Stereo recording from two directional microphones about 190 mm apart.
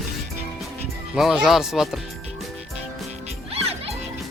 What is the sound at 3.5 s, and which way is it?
Music, 30° right (ahead or behind).